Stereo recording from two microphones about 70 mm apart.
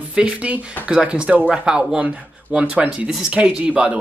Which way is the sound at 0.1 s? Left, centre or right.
Centre.